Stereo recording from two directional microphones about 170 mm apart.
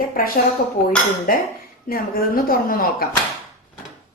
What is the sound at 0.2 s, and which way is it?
A woman's voice, 55° left (ahead or behind).